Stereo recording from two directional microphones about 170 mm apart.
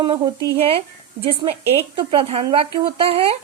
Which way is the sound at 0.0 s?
30° right (ahead or behind).